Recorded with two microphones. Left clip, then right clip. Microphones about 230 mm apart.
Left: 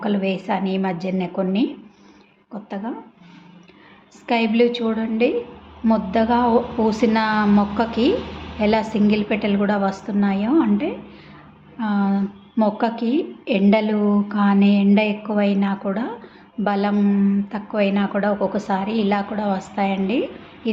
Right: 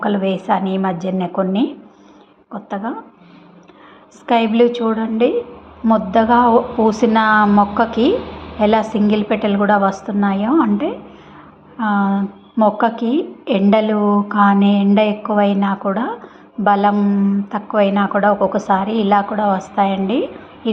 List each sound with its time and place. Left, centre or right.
0.0 s a woman's voice: centre
4.6 s a woman's voice: centre
13.0 s a woman's voice: left
13.4 s a woman's voice: centre